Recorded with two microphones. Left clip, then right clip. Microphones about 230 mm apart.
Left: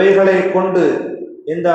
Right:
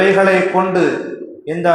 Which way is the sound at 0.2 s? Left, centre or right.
Right.